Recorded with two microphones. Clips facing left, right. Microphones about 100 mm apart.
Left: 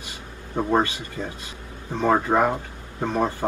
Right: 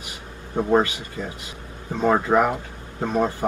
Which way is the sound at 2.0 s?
15° right (ahead or behind).